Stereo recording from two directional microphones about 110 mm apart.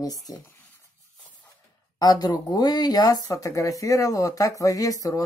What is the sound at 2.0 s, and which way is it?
Speech, 35° left (ahead or behind).